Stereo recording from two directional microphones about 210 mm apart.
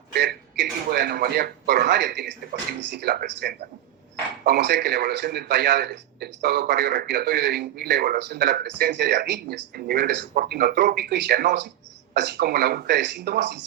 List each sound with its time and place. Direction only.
0.1 s a man's voice: 50° right (ahead or behind)